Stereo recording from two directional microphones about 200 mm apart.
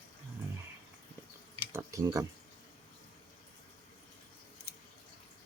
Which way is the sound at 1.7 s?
15° right (ahead or behind).